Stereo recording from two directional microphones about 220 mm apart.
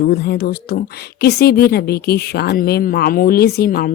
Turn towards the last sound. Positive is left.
turn(degrees=45)  # may be behind; listen again after turning